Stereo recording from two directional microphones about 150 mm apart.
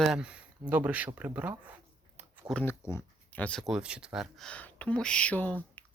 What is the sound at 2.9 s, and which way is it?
Speech, 10° left (ahead or behind).